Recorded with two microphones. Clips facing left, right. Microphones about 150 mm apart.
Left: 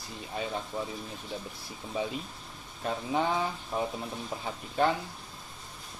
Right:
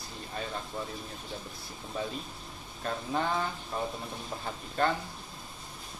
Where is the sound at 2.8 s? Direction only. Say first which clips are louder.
Left 2 dB; 10° left (ahead or behind).